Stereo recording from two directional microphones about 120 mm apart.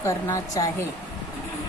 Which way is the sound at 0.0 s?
25° left (ahead or behind).